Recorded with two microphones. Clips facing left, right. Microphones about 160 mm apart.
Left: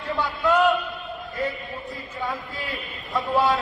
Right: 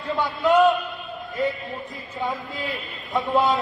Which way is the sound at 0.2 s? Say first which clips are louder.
Right 3 dB; 20° right (ahead or behind).